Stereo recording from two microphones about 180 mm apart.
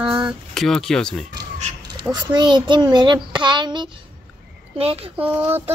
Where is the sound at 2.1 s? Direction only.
25° right (ahead or behind).